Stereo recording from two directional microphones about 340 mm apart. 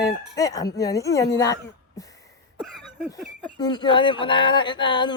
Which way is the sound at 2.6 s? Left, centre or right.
Centre.